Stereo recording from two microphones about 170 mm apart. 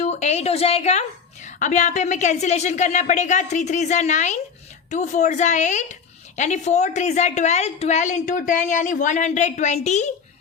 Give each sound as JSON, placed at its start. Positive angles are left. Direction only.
{"t": 0.0, "sound": "a woman's voice", "side_deg": 40}